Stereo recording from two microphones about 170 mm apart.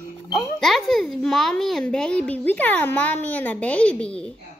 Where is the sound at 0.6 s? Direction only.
Centre (ahead or behind).